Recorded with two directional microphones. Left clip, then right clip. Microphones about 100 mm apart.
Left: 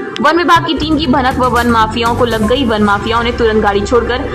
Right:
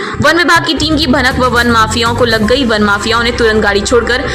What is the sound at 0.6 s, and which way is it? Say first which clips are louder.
A woman's voice: right 2 dB; 20° right (ahead or behind).